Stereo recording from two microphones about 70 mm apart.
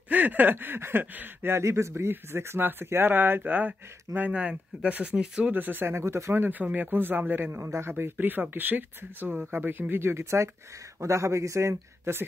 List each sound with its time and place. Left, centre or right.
0.1 s speech: right
1.6 s speech: right
6.4 s speech: right